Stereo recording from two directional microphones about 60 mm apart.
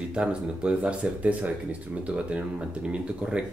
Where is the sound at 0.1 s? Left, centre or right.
Centre.